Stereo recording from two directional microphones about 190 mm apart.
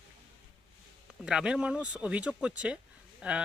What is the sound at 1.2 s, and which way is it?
Speech, 5° right (ahead or behind).